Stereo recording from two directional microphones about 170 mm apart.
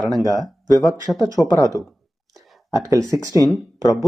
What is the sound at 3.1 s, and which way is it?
Speech, 20° right (ahead or behind).